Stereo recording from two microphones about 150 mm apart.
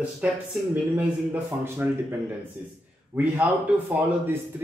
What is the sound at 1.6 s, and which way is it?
Speech, 15° right (ahead or behind).